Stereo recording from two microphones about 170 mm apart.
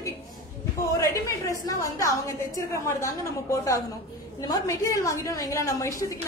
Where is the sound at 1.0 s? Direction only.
20° left (ahead or behind).